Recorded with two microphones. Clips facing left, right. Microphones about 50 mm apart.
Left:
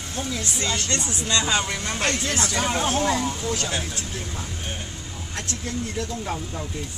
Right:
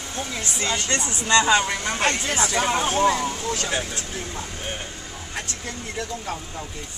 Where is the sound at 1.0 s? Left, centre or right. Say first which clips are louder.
Right 1 dB; right.